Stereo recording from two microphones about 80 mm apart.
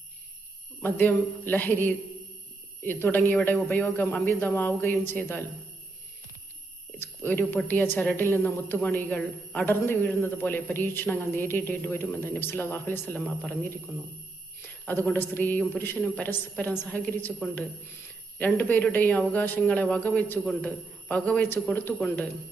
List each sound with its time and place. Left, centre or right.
0.8 s a woman's voice: left
7.0 s a woman's voice: left
14.8 s a woman's voice: left
18.3 s a woman's voice: left